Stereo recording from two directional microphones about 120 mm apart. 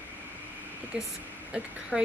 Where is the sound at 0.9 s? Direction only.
10° right (ahead or behind).